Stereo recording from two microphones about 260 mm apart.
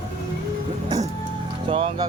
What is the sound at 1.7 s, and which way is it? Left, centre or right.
Speech, right.